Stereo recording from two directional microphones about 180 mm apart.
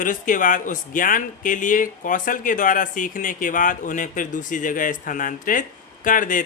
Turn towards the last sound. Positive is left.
turn(degrees=50)  # may be behind; listen again after turning